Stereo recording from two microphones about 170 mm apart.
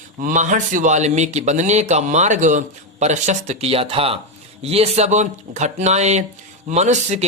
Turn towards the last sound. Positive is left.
turn(degrees=-45)  # may be behind; listen again after turning